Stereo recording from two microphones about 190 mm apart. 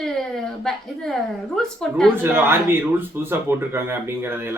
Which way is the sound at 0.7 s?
Centre (ahead or behind).